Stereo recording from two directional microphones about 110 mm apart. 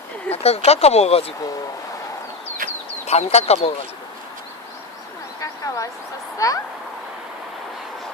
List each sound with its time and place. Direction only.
0.3 s speech: 70° left (ahead or behind)
3.1 s speech: 80° left
5.4 s a sound: 30° left (ahead or behind)
6.4 s speech: 35° left (ahead or behind)